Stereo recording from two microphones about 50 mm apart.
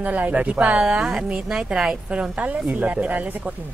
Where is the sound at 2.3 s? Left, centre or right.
Right.